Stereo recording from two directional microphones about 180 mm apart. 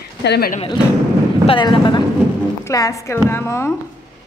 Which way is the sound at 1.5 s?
25° left (ahead or behind).